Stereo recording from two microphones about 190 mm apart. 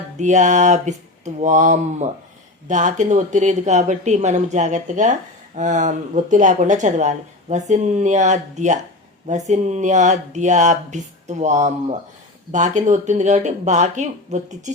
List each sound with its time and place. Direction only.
0.2 s speech: 40° right (ahead or behind)